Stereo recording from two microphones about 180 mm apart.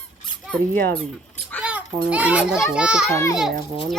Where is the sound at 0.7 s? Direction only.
55° right (ahead or behind).